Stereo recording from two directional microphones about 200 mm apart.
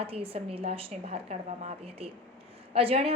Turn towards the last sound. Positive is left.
turn(degrees=-30)  # may be behind; listen again after turning